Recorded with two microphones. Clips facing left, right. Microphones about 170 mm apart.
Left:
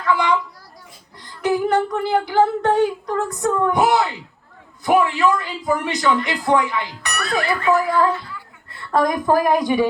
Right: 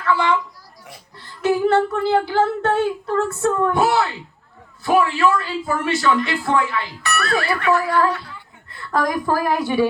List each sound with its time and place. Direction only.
0.1 s a sound: 15° left (ahead or behind)
1.4 s female singing: 15° left (ahead or behind)
2.0 s a woman's voice: 15° left (ahead or behind)